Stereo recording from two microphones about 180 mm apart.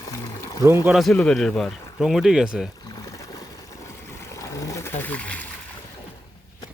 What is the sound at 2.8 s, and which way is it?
Boat, 20° left (ahead or behind).